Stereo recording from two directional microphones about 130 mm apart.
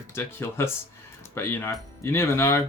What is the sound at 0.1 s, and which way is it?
Speech, 20° left (ahead or behind).